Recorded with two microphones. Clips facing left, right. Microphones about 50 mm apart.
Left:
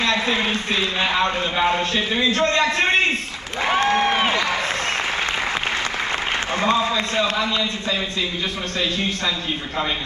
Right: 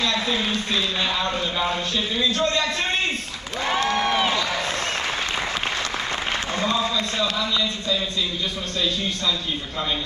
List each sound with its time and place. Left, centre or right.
0.0 s a man's voice: left
3.6 s a sound: left
6.5 s a man's voice: left